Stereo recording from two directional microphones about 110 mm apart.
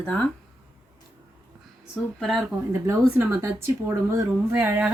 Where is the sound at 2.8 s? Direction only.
25° right (ahead or behind).